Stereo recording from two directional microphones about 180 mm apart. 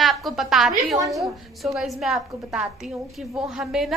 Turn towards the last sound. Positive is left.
turn(degrees=-5)  # may be behind; listen again after turning